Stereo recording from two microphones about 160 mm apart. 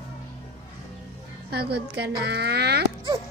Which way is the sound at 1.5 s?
85° right.